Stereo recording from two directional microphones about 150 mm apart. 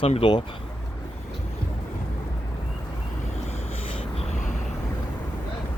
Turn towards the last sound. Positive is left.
turn(degrees=35)  # may be behind; listen again after turning